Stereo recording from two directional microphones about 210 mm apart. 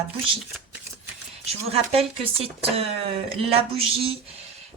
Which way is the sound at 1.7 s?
25° right (ahead or behind).